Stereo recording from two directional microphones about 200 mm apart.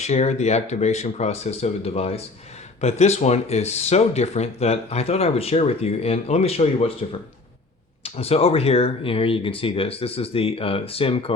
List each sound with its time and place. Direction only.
0.0 s speech: 35° left (ahead or behind)